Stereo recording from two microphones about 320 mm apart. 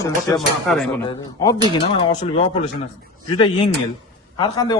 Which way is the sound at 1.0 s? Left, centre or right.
Centre.